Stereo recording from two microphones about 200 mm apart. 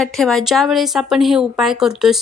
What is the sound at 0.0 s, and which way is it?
Speech, centre (ahead or behind).